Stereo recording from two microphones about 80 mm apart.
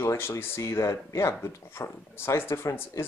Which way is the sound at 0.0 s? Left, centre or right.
Left.